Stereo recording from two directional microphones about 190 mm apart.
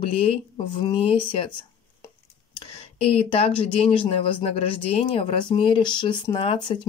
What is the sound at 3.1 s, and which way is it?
Speech, 30° left (ahead or behind).